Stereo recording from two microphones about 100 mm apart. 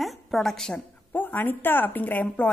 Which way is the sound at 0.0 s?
Centre (ahead or behind).